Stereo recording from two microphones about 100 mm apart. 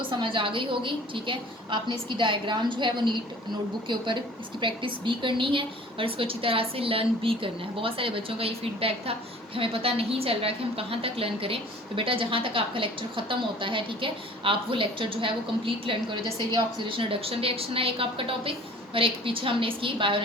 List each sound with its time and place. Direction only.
0.0 s a woman's voice: 60° right (ahead or behind)
17.0 s a woman's voice: 70° right (ahead or behind)